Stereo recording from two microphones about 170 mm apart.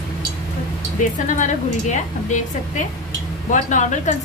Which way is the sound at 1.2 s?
50° left (ahead or behind).